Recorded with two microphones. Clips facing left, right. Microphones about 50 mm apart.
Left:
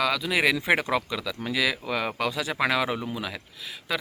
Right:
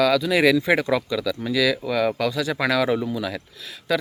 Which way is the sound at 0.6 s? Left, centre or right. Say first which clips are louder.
Right 3 dB; left.